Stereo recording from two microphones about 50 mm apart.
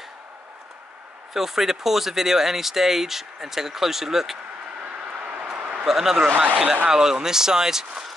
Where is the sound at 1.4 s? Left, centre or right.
Centre.